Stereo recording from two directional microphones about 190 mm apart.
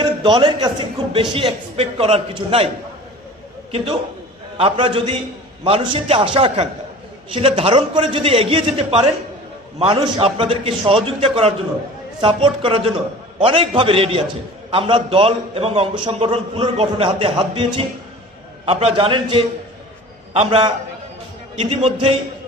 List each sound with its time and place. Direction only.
0.0 s a man's voice: 25° right (ahead or behind)
4.5 s a man's voice: 30° right (ahead or behind)